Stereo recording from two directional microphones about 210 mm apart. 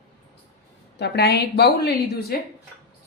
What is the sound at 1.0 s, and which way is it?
Speech, 50° left (ahead or behind).